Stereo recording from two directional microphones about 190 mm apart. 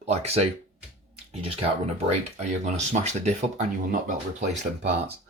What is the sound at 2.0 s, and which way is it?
Speech, 35° right (ahead or behind).